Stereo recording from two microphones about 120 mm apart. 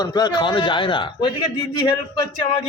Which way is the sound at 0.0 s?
35° left (ahead or behind).